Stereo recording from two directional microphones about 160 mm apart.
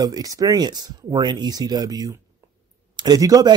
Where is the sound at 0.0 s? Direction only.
25° right (ahead or behind).